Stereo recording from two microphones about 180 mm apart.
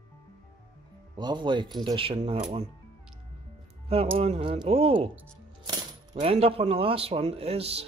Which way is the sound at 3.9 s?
35° right (ahead or behind).